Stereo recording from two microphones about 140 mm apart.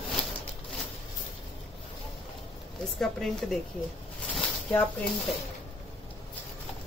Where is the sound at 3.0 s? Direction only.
Centre (ahead or behind).